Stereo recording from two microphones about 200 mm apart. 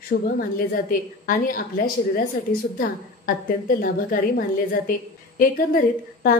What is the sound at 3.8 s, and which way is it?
A woman's voice, 45° left (ahead or behind).